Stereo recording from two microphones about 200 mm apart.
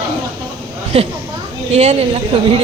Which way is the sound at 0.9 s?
30° right (ahead or behind).